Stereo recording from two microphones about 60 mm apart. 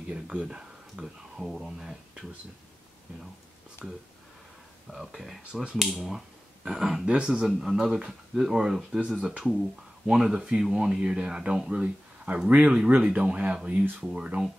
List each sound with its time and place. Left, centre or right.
0.1 s speech: centre
3.8 s speech: centre
7.1 s speech: centre
7.4 s speech: centre
10.0 s speech: centre